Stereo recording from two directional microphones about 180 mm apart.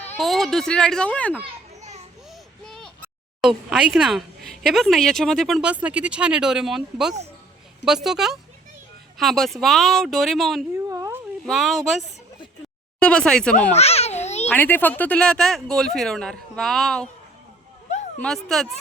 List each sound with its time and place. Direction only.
0.0 s speech: 5° left (ahead or behind)
1.8 s children playing: 40° right (ahead or behind)
2.6 s a sound: centre (ahead or behind)
3.4 s speech: 5° right (ahead or behind)
10.8 s a sound: 15° right (ahead or behind)
11.4 s speech: centre (ahead or behind)
13.0 s speech: 5° left (ahead or behind)
13.7 s babbling: 35° left (ahead or behind)
14.4 s speech: 10° left (ahead or behind)
18.2 s speech: 5° left (ahead or behind)